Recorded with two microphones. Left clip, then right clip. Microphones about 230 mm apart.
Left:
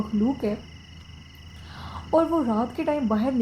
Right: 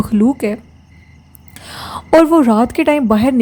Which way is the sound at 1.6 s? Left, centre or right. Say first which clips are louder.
Right 13 dB; right.